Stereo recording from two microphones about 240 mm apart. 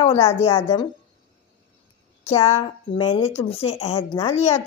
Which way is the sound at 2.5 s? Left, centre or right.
Left.